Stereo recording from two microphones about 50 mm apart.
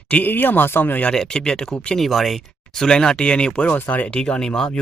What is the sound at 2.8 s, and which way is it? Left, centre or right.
Speech, centre.